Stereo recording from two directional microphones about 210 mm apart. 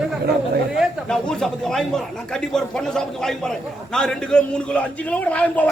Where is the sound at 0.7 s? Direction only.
Centre (ahead or behind).